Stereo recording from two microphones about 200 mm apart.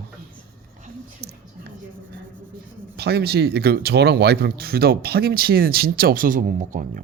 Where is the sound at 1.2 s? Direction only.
55° right (ahead or behind).